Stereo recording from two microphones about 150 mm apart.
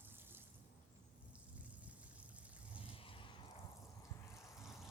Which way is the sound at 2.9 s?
35° left (ahead or behind).